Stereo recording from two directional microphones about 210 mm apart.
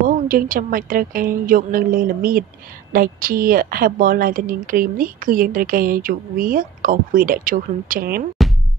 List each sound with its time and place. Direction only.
0.0 s a woman's voice: 40° right (ahead or behind)
8.4 s music: centre (ahead or behind)